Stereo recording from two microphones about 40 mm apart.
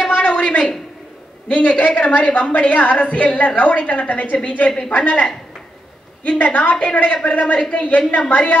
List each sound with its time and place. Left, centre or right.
0.0 s a sound: left
1.5 s a woman's voice: left
6.2 s a woman's voice: left